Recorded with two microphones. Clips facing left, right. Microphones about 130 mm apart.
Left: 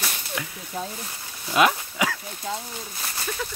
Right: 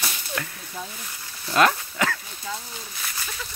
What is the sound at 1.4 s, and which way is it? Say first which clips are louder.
Dog: even; 10° left (ahead or behind).